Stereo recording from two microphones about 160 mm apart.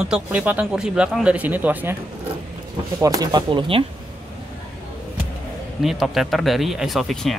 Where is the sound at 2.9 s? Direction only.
20° right (ahead or behind).